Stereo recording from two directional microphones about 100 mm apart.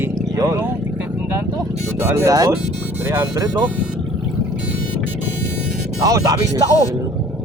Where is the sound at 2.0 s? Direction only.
25° right (ahead or behind).